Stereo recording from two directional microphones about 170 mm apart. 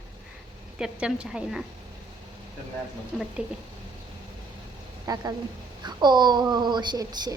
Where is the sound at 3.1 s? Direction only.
Centre (ahead or behind).